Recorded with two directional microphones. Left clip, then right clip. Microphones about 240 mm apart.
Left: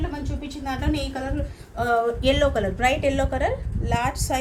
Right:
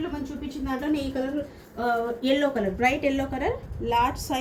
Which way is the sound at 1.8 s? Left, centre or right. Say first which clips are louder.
Left 4 dB; left.